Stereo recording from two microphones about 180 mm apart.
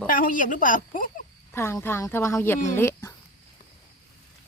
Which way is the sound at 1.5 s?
15° left (ahead or behind).